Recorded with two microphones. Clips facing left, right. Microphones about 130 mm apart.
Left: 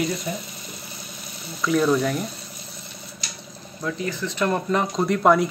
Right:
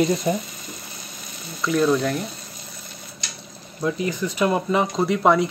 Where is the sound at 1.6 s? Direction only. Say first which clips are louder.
Even; centre (ahead or behind).